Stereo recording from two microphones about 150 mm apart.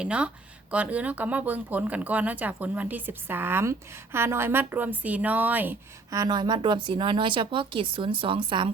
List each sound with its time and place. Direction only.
0.0 s speech: 10° right (ahead or behind)
6.1 s speech: 25° right (ahead or behind)